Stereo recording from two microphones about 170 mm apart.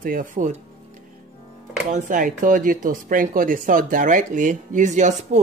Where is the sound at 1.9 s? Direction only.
45° right (ahead or behind).